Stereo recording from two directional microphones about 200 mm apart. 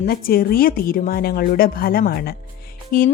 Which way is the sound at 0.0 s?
45° left (ahead or behind).